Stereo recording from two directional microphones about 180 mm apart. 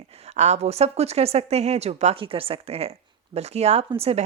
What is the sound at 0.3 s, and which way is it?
A woman's voice, 40° right (ahead or behind).